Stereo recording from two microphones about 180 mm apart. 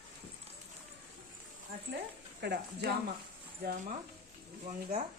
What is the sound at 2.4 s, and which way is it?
Speech, 65° right (ahead or behind).